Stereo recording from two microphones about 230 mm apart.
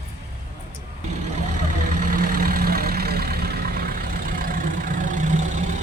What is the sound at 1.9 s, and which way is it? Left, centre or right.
Vehicle, right.